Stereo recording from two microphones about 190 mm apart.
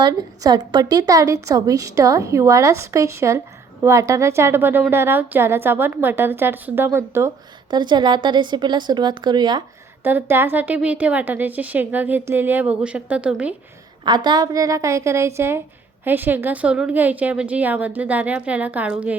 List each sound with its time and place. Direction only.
0.0 s a woman's voice: 20° right (ahead or behind)
10.0 s a woman's voice: 10° right (ahead or behind)
14.3 s a woman's voice: 20° right (ahead or behind)